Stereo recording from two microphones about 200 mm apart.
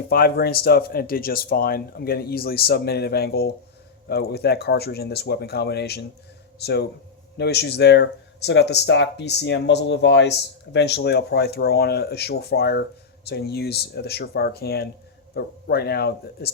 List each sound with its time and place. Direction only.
0.1 s speech: 50° left (ahead or behind)